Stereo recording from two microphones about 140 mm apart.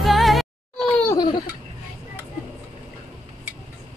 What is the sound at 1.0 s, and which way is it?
Laughter, 25° left (ahead or behind).